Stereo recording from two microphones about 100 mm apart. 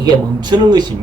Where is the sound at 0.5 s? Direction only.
45° right (ahead or behind).